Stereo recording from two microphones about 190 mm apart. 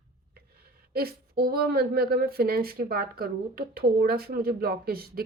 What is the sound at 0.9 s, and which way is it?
Speech, 55° right (ahead or behind).